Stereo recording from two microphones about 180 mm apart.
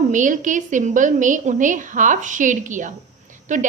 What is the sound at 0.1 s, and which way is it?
A woman's voice, 45° right (ahead or behind).